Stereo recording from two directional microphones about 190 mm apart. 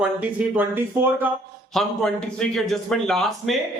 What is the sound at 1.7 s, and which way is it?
Speech, centre (ahead or behind).